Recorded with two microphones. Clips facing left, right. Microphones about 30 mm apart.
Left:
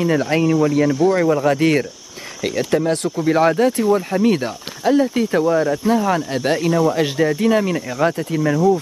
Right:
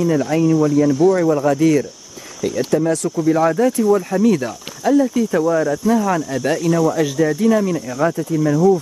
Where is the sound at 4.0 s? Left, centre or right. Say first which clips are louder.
Right 1 dB; left.